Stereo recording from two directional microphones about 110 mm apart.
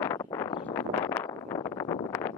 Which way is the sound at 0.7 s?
20° left (ahead or behind).